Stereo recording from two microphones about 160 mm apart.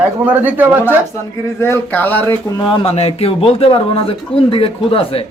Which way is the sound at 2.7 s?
40° left (ahead or behind).